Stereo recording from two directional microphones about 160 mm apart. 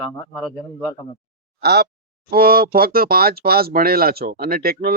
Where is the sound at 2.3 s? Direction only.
65° right (ahead or behind).